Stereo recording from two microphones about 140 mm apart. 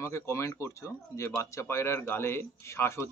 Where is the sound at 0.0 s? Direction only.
20° left (ahead or behind).